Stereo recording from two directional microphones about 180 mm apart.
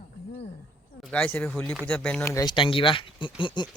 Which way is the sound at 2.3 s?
20° left (ahead or behind).